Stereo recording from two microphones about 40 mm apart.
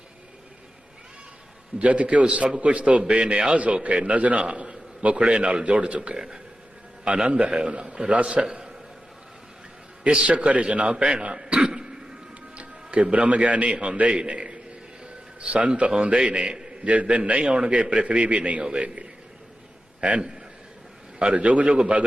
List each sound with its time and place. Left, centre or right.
1.8 s a man's voice: right
10.2 s a man's voice: right
10.9 s throat clearing: right
12.5 s a man's voice: right
16.9 s a man's voice: right
18.6 s a man's voice: right